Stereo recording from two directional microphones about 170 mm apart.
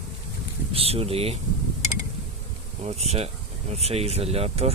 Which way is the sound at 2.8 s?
40° right (ahead or behind).